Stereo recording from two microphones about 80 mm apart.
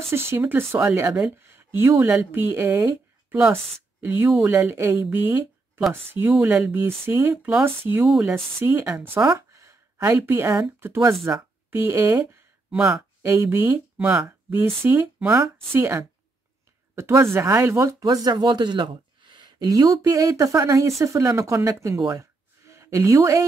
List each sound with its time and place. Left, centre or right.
0.1 s a woman's voice: right
6.2 s speech: left
7.1 s speech: right
8.0 s speech: centre
8.5 s speech: right
9.5 s a sound: right
10.1 s speech: right
12.7 s speech: centre
13.2 s speech: right
13.7 s speech: centre
14.5 s speech: right
18.0 s speech: right
18.3 s speech: right
19.6 s speech: right